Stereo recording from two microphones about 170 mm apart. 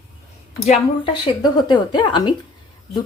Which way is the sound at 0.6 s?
35° left (ahead or behind).